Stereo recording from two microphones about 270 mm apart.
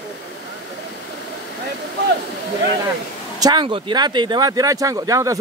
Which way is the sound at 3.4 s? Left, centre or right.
Centre.